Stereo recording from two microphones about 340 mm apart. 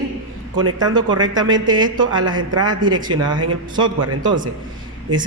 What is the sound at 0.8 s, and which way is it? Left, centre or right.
Speech, centre.